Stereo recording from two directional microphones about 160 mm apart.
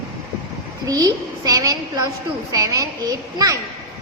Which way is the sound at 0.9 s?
25° right (ahead or behind).